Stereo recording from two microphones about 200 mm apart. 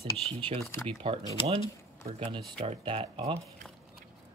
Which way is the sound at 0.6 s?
10° left (ahead or behind).